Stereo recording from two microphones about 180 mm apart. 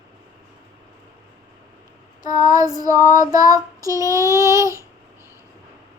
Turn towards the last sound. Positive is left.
turn(degrees=-15)  # may be behind; listen again after turning